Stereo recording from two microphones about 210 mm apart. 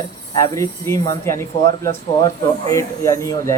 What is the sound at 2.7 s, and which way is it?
Speech, 15° left (ahead or behind).